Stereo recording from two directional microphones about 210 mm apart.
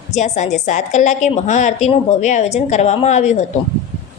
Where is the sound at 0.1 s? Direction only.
35° left (ahead or behind).